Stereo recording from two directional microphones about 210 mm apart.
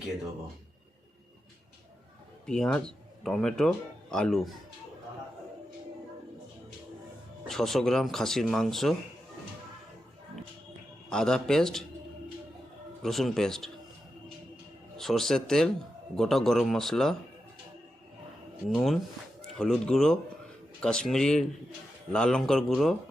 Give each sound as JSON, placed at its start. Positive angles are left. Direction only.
{"t": 2.5, "sound": "speech", "side_deg": 5}
{"t": 7.4, "sound": "speech", "side_deg": 0}
{"t": 11.1, "sound": "speech", "side_deg": 5}
{"t": 13.0, "sound": "speech", "side_deg": 0}
{"t": 14.9, "sound": "speech", "side_deg": 0}
{"t": 18.7, "sound": "speech", "side_deg": 0}